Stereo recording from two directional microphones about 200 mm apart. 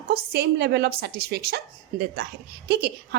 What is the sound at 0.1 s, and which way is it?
A woman's voice, 55° right (ahead or behind).